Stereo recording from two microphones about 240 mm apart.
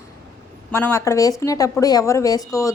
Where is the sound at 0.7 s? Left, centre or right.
Centre.